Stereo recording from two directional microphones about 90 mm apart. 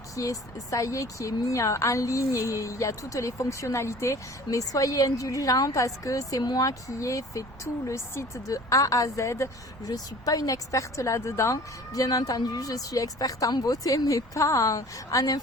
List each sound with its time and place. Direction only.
0.2 s a woman's voice: 40° left (ahead or behind)